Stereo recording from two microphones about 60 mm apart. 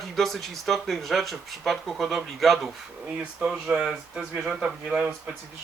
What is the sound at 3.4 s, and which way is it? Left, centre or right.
Speech, centre.